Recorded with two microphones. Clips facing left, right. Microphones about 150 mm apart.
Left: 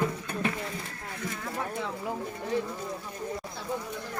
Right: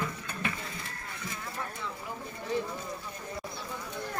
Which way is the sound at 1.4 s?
60° left (ahead or behind).